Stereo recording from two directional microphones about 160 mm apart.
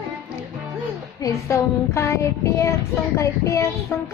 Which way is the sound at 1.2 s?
20° left (ahead or behind).